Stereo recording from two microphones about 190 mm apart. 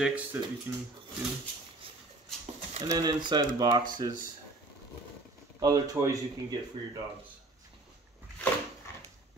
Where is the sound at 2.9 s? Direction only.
20° right (ahead or behind).